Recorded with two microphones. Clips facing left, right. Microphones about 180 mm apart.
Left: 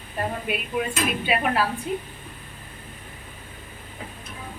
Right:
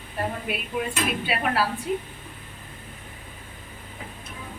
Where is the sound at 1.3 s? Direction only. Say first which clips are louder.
Left 3 dB; 5° right (ahead or behind).